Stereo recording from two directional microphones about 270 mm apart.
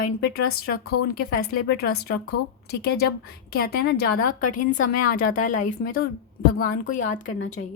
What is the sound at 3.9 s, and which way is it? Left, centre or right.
A woman's voice, left.